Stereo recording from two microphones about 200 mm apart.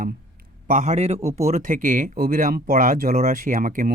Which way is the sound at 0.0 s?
45° right (ahead or behind).